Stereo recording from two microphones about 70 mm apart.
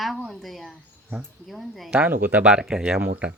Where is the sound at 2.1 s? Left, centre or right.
Right.